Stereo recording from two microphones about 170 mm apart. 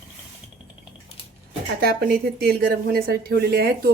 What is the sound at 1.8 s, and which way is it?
Speech, 65° right (ahead or behind).